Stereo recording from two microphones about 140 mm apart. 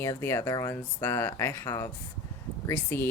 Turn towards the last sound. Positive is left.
turn(degrees=15)  # may be behind; listen again after turning